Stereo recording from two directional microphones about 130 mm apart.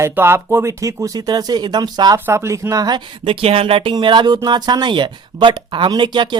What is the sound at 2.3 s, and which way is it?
Speech, 20° right (ahead or behind).